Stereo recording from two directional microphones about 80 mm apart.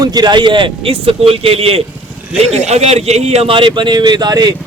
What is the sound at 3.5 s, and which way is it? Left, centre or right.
Speech, right.